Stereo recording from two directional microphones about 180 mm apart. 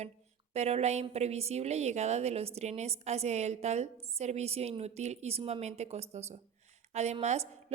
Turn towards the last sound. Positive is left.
turn(degrees=-40)  # may be behind; listen again after turning